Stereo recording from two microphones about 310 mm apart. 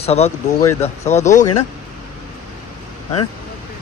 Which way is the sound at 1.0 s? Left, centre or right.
Left.